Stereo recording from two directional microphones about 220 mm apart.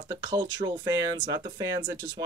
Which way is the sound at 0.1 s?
20° right (ahead or behind).